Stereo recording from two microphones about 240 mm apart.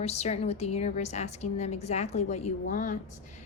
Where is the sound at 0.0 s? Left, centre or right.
Left.